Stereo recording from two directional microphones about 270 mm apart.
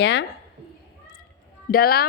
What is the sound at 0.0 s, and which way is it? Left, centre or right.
Speech, left.